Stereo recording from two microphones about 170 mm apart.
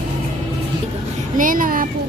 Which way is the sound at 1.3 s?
55° right (ahead or behind).